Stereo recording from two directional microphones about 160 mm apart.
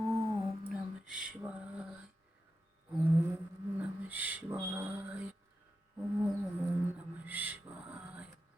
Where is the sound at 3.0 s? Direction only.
15° right (ahead or behind).